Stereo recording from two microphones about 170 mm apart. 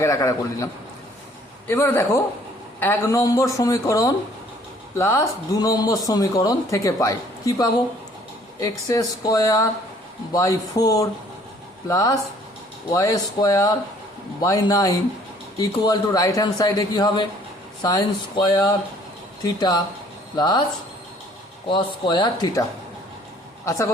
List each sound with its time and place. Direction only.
0.0 s speech: 20° left (ahead or behind)
21.7 s speech: 25° left (ahead or behind)
23.6 s speech: 15° left (ahead or behind)